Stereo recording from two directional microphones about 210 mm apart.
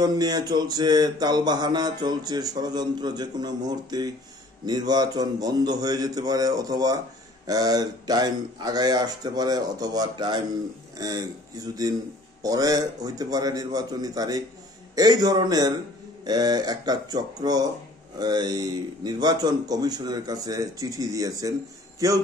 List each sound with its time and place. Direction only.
0.0 s mantra: 20° right (ahead or behind)
11.0 s a man's voice: 15° right (ahead or behind)
15.0 s mantra: 20° right (ahead or behind)
22.0 s a man's voice: 15° right (ahead or behind)